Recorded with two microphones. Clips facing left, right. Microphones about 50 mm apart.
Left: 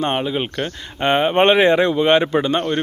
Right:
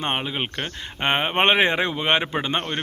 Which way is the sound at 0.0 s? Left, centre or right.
Centre.